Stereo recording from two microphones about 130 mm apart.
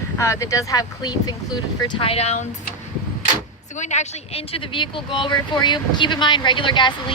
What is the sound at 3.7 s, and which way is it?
Speech, 65° left (ahead or behind).